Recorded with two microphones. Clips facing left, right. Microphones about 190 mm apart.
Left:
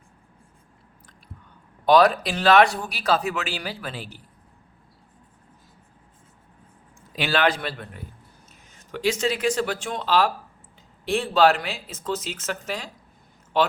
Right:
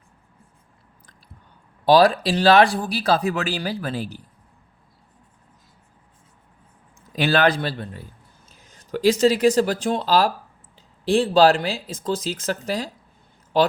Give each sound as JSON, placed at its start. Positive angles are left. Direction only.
{"t": 1.8, "sound": "speech", "side_deg": -30}
{"t": 7.2, "sound": "speech", "side_deg": -40}